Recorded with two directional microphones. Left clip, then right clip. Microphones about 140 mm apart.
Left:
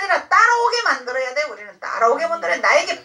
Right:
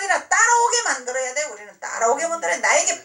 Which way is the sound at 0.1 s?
40° right (ahead or behind).